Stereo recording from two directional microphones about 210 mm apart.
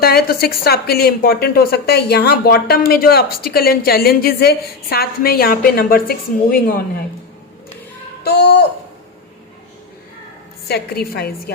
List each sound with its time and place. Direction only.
0.0 s a woman's voice: 45° left (ahead or behind)
8.2 s a woman's voice: 50° left (ahead or behind)
10.7 s a woman's voice: 50° left (ahead or behind)